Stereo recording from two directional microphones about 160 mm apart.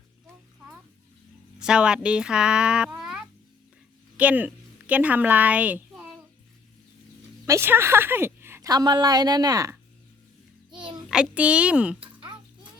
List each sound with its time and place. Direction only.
1.5 s a woman's voice: 5° right (ahead or behind)
7.4 s a woman's voice: 15° right (ahead or behind)
11.1 s speech: 5° right (ahead or behind)